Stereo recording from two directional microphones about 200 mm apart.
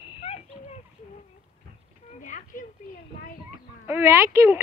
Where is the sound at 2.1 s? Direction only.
40° left (ahead or behind).